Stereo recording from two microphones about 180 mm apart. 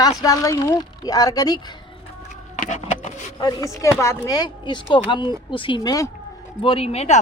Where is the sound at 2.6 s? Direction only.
40° left (ahead or behind).